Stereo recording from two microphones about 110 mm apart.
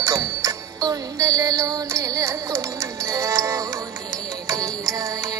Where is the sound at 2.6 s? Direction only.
30° right (ahead or behind).